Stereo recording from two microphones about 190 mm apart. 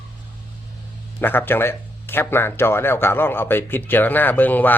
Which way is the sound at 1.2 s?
10° left (ahead or behind).